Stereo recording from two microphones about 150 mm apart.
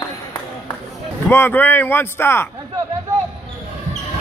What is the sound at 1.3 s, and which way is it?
Speech, 15° left (ahead or behind).